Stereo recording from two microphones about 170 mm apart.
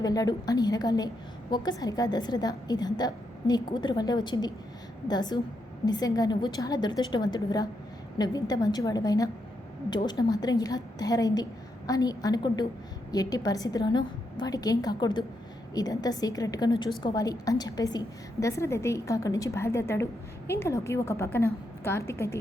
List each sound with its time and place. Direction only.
0.0 s a woman's voice: 20° left (ahead or behind)